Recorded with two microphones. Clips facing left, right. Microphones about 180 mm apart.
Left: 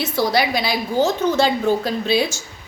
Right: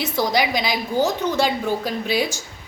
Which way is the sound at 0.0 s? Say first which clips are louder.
Left 2 dB; 15° right (ahead or behind).